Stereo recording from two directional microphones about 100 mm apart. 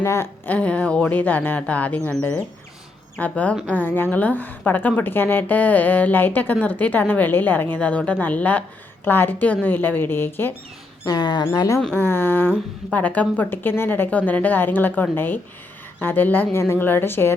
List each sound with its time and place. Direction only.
0.0 s a woman's voice: 25° left (ahead or behind)
11.0 s speech: 45° left (ahead or behind)
11.9 s a woman's voice: 20° left (ahead or behind)